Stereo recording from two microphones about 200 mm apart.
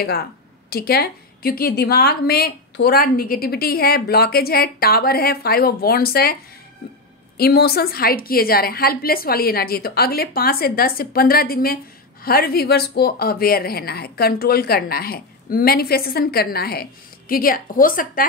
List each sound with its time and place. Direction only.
0.0 s a woman's voice: 50° left (ahead or behind)
7.3 s a woman's voice: 50° left (ahead or behind)